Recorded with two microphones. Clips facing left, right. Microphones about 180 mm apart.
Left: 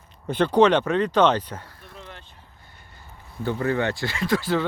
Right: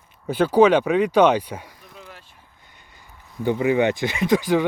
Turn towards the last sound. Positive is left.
turn(degrees=-15)  # may be behind; listen again after turning